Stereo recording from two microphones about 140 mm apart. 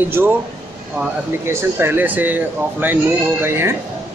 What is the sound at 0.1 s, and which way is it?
Speech, 15° right (ahead or behind).